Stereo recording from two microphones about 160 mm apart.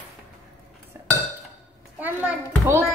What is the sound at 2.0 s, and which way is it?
Speech, 15° right (ahead or behind).